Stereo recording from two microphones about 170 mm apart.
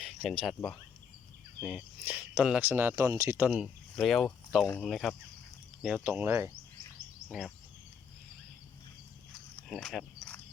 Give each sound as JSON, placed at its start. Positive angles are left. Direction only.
{"t": 0.0, "sound": "a sound", "side_deg": 0}
{"t": 0.4, "sound": "speech", "side_deg": 5}
{"t": 1.6, "sound": "speech", "side_deg": -5}
{"t": 3.5, "sound": "speech", "side_deg": 0}
{"t": 9.6, "sound": "cricket", "side_deg": 0}